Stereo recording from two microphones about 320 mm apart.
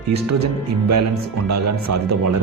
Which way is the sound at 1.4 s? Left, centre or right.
Right.